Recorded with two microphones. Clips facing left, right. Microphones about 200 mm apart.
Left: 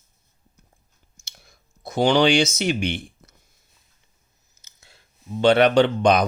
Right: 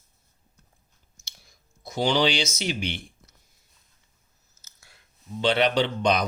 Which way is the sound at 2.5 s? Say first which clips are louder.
Left 6 dB; 55° left (ahead or behind).